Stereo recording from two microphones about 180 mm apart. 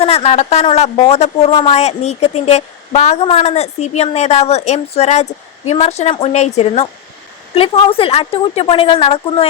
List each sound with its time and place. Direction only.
0.0 s a woman's voice: 35° left (ahead or behind)